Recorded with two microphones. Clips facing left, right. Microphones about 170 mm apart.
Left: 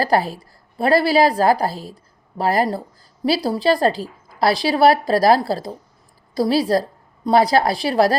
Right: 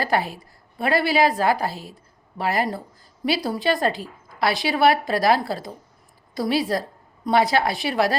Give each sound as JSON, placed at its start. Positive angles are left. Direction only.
{"t": 0.0, "sound": "a woman's voice", "side_deg": 35}